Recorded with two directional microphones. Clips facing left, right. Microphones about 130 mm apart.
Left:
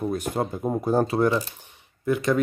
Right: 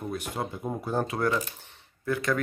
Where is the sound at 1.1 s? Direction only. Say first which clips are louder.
Left 6 dB; 25° left (ahead or behind).